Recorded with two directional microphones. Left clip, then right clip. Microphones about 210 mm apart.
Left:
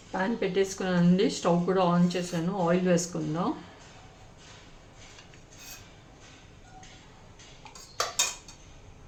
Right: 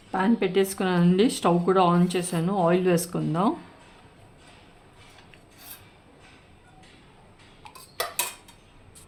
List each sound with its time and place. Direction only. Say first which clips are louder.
0.1 s speech: right 5 dB; 50° right (ahead or behind)